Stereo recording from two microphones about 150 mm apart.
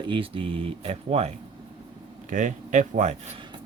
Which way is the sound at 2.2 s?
55° right (ahead or behind).